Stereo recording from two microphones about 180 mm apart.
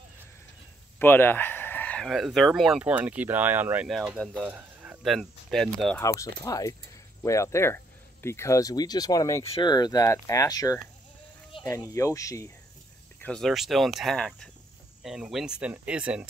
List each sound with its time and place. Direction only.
0.9 s speech: 10° left (ahead or behind)
5.9 s speech: 15° left (ahead or behind)
13.2 s speech: 5° left (ahead or behind)